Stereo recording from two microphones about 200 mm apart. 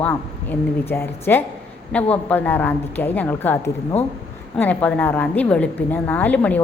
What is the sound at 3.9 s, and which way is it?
Speech, 30° left (ahead or behind).